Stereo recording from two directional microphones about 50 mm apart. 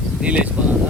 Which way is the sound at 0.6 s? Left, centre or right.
Centre.